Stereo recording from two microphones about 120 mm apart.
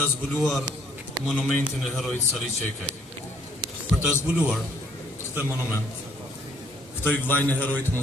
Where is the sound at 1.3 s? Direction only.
15° left (ahead or behind).